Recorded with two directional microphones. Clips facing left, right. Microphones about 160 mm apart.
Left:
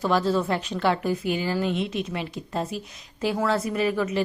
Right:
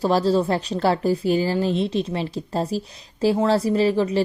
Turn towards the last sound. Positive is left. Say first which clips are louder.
# right 5 dB
turn(degrees=-30)  # may be behind; listen again after turning